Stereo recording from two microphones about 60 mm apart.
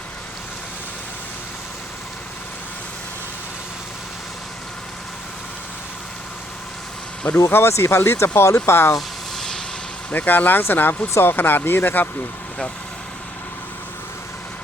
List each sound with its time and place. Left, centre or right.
7.5 s speech: left
9.0 s a sound: centre
10.1 s speech: left